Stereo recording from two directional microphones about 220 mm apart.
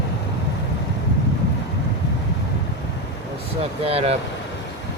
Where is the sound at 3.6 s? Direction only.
25° right (ahead or behind).